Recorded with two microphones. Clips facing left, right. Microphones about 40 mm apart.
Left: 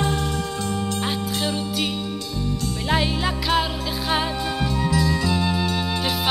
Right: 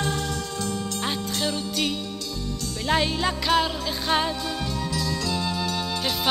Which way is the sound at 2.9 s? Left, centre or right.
Centre.